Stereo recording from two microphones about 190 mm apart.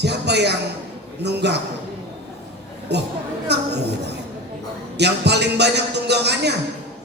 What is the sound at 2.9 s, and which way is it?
Speech, 65° right (ahead or behind).